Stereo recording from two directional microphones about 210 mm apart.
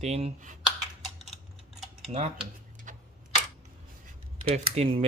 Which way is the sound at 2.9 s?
35° right (ahead or behind).